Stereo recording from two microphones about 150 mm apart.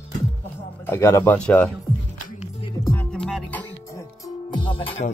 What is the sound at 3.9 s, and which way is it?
Music, 20° left (ahead or behind).